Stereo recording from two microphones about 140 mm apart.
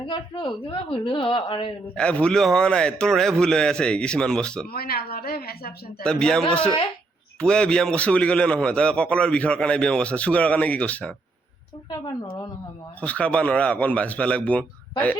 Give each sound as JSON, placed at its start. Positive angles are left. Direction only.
{"t": 0.1, "sound": "speech", "side_deg": 35}
{"t": 2.0, "sound": "a man's voice", "side_deg": 5}
{"t": 4.7, "sound": "a woman's voice", "side_deg": 90}
{"t": 6.0, "sound": "a man's voice", "side_deg": 5}
{"t": 11.9, "sound": "speech", "side_deg": 35}
{"t": 13.0, "sound": "a man's voice", "side_deg": 10}